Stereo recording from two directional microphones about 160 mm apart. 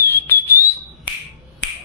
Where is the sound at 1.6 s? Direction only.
90° left.